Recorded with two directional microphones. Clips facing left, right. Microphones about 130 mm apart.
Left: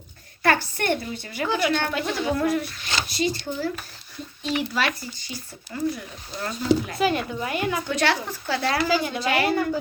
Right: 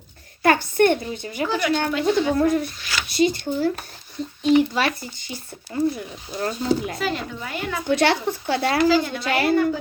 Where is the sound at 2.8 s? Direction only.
25° left (ahead or behind).